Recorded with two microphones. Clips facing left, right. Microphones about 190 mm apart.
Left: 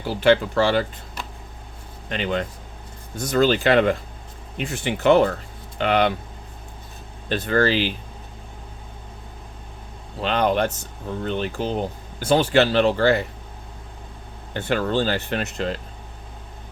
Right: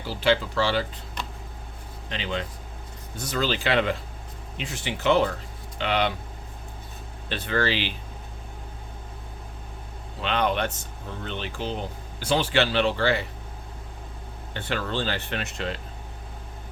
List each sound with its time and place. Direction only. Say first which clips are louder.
0.0 s speech: left 6 dB; 55° left (ahead or behind)
2.0 s speech: left 6 dB; 50° left (ahead or behind)
7.3 s speech: left 6 dB; 45° left (ahead or behind)
10.2 s speech: left 5 dB; 40° left (ahead or behind)
14.5 s speech: left 7 dB; 45° left (ahead or behind)